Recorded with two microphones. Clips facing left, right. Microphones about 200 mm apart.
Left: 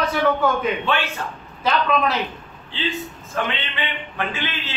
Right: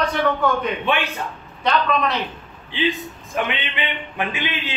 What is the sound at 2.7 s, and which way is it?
A man's voice, 15° right (ahead or behind).